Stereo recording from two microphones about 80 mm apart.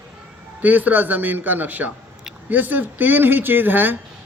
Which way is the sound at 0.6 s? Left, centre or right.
Right.